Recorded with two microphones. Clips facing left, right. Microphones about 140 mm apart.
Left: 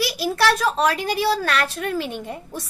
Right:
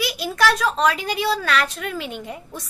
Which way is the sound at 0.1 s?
10° left (ahead or behind).